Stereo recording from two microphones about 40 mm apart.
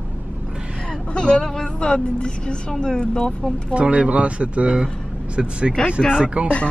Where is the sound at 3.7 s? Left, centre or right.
Right.